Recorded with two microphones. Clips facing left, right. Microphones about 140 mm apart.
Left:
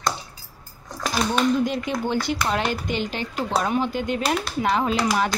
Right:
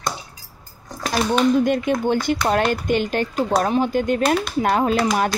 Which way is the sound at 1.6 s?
55° right (ahead or behind).